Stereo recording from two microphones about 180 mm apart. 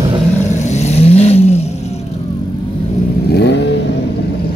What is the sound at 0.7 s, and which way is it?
Vehicle, 35° left (ahead or behind).